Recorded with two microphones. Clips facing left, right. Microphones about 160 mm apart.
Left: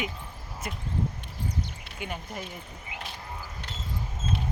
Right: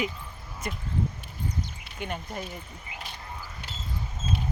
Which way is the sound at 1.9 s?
5° left (ahead or behind).